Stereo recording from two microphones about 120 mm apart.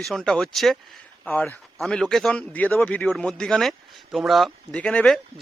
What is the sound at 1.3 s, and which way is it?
Speech, 10° left (ahead or behind).